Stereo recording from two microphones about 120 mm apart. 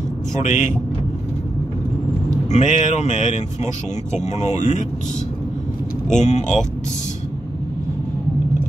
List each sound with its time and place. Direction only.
0.4 s speech: 90° left
2.5 s speech: 90° left
6.1 s speech: 75° left (ahead or behind)